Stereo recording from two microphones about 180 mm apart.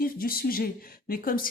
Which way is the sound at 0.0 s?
55° left (ahead or behind).